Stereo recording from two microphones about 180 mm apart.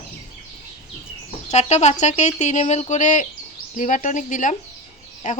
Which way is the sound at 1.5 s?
40° left (ahead or behind).